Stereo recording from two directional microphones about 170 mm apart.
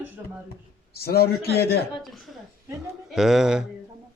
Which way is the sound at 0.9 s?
65° left (ahead or behind).